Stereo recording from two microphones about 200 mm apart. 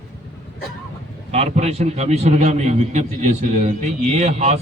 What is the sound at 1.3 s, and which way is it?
A man's voice, 30° right (ahead or behind).